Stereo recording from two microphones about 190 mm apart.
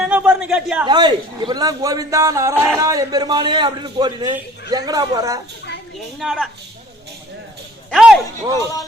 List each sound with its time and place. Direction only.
0.0 s a sound: 5° right (ahead or behind)
0.9 s speech: 25° right (ahead or behind)
6.1 s a woman's voice: centre (ahead or behind)
7.9 s speech: centre (ahead or behind)